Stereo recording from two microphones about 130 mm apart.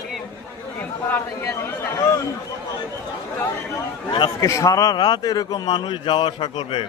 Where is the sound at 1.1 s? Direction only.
20° left (ahead or behind).